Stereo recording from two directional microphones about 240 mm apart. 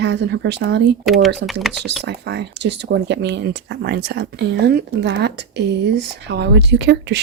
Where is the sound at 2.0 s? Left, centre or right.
Right.